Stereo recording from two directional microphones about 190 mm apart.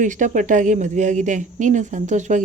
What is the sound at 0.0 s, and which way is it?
Speech, 40° right (ahead or behind).